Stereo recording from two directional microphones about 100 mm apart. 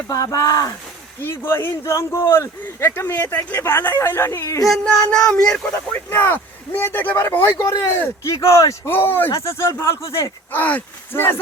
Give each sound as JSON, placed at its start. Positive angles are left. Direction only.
{"t": 0.1, "sound": "speech", "side_deg": 35}
{"t": 1.2, "sound": "speech", "side_deg": 25}
{"t": 4.6, "sound": "speech", "side_deg": 5}
{"t": 10.5, "sound": "speech", "side_deg": 15}